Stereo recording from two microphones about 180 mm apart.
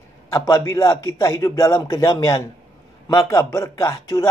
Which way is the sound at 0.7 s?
15° left (ahead or behind).